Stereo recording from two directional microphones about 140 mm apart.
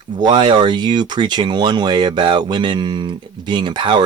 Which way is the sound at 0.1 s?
30° right (ahead or behind).